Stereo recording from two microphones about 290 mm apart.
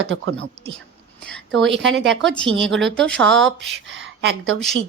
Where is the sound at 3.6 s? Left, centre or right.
Right.